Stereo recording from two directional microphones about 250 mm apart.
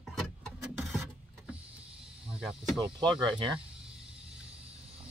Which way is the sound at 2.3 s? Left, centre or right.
Centre.